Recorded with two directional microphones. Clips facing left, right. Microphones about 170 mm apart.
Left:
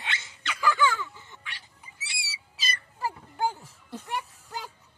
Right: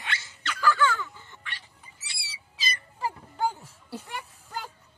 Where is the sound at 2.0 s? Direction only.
10° left (ahead or behind).